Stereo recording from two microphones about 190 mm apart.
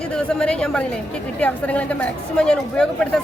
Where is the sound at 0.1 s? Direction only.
5° left (ahead or behind).